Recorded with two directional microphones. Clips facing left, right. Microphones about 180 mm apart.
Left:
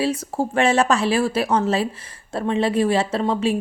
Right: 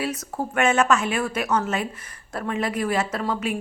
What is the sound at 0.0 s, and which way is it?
A woman's voice, 30° left (ahead or behind).